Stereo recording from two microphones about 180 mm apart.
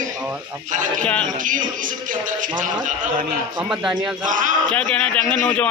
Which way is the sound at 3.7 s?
5° right (ahead or behind).